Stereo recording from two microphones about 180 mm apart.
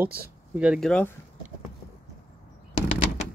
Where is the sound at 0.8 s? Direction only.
5° left (ahead or behind).